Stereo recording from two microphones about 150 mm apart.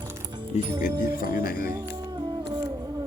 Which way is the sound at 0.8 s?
70° left (ahead or behind).